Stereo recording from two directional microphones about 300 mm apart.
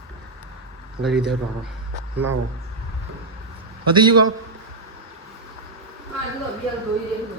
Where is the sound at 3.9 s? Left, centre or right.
Centre.